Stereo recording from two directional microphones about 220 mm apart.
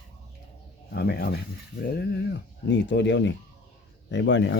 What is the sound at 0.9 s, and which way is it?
Speech, 50° left (ahead or behind).